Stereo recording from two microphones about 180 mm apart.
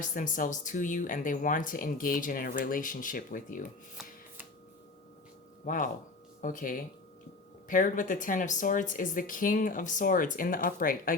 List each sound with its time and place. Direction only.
0.0 s speech: 45° left (ahead or behind)
5.6 s speech: 45° left (ahead or behind)